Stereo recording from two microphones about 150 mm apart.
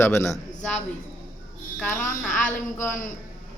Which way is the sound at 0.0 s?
20° left (ahead or behind).